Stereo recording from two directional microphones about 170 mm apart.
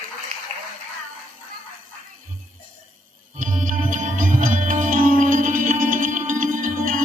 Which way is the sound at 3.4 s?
50° right (ahead or behind).